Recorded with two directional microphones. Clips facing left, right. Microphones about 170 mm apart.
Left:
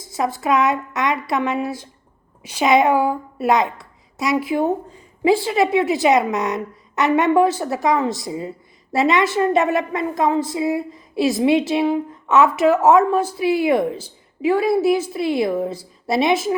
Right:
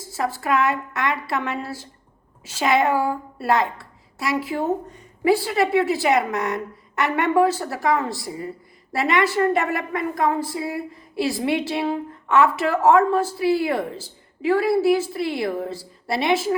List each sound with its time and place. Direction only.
0.0 s a woman's voice: 20° left (ahead or behind)